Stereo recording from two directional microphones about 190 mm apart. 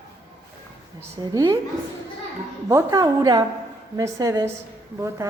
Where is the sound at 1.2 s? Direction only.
15° right (ahead or behind).